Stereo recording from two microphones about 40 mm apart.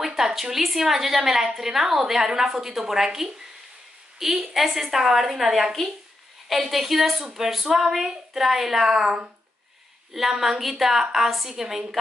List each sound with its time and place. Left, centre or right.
0.0 s a woman's voice: centre
10.3 s a woman's voice: centre